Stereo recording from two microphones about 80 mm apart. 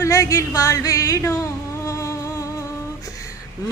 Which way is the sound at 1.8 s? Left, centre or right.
Left.